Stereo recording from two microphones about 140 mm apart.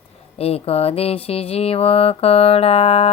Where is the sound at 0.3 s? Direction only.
45° left (ahead or behind).